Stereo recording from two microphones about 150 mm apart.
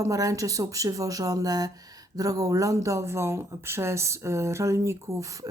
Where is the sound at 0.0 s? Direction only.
20° right (ahead or behind).